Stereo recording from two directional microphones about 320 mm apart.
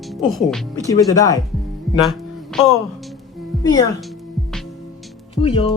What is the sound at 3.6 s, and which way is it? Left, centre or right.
Speech, centre.